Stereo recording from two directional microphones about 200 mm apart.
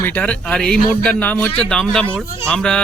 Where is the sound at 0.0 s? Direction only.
10° left (ahead or behind).